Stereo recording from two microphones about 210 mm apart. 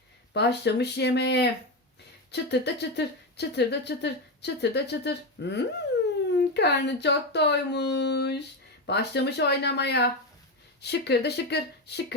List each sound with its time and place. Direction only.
0.3 s speech: 55° left (ahead or behind)